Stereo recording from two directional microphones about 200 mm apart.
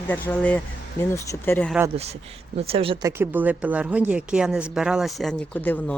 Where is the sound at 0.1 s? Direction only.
10° left (ahead or behind).